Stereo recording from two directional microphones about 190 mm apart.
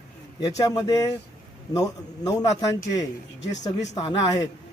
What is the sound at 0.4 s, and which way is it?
Speech, 20° left (ahead or behind).